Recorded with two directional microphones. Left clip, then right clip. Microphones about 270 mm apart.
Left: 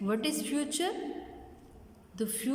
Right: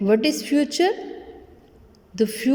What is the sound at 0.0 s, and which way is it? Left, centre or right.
Speech, right.